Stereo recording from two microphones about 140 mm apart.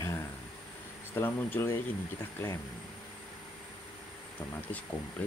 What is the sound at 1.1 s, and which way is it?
Speech, 15° left (ahead or behind).